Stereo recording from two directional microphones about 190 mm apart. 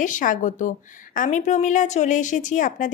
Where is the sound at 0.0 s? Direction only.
45° left (ahead or behind).